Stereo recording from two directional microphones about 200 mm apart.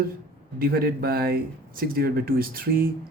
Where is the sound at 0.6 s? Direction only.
50° right (ahead or behind).